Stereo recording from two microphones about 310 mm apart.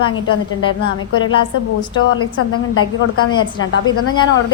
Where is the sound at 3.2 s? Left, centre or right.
Centre.